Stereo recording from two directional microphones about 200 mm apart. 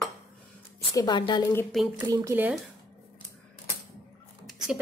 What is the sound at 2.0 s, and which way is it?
Speech, 10° right (ahead or behind).